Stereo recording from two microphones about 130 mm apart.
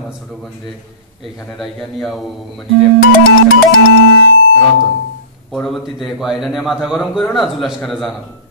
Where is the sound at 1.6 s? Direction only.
Centre (ahead or behind).